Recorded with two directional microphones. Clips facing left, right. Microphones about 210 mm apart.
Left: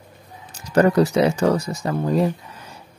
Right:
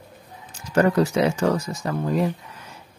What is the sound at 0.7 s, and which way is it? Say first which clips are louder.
Speech: left 3 dB; 35° left (ahead or behind).